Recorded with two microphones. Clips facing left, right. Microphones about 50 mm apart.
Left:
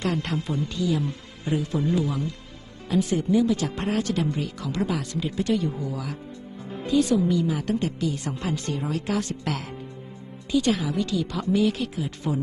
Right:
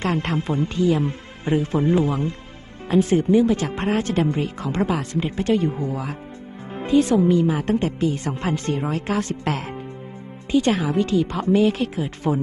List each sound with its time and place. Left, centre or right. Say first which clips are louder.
0.0 s speech: right 4 dB; right